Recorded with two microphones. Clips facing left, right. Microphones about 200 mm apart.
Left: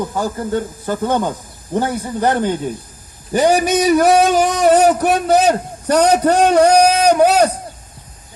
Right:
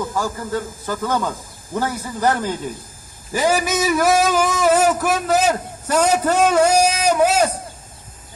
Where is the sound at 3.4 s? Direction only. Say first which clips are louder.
Left 5 dB; 35° left (ahead or behind).